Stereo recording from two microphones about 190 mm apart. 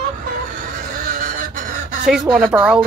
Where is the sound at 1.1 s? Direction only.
45° right (ahead or behind).